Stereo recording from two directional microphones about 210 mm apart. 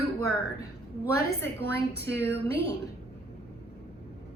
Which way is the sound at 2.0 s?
55° right (ahead or behind).